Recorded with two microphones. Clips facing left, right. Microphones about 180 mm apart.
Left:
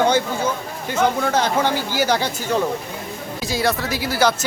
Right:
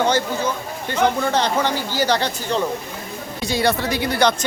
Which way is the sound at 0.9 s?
10° left (ahead or behind).